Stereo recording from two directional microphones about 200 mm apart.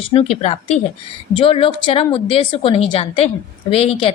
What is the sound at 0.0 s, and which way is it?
A woman's voice, 30° left (ahead or behind).